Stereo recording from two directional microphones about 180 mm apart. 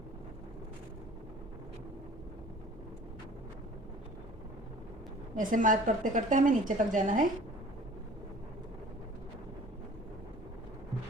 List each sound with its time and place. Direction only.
5.4 s speech: 45° right (ahead or behind)